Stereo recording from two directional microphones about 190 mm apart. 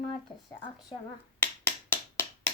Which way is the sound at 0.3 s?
20° left (ahead or behind).